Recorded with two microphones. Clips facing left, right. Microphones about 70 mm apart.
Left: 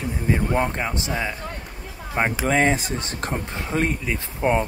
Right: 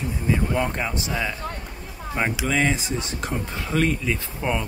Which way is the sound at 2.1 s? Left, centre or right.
Left.